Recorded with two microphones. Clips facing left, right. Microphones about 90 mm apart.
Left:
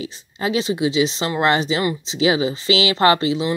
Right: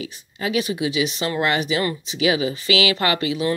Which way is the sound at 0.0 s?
30° left (ahead or behind).